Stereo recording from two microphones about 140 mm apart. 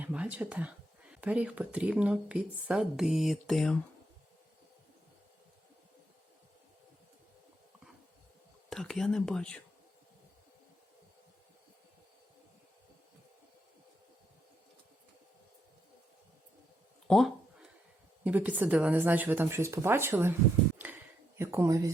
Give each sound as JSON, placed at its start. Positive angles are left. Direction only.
{"t": 0.0, "sound": "speech", "side_deg": -10}
{"t": 8.7, "sound": "speech", "side_deg": 5}
{"t": 17.1, "sound": "a sound", "side_deg": 0}
{"t": 18.2, "sound": "speech", "side_deg": -10}
{"t": 21.3, "sound": "speech", "side_deg": -15}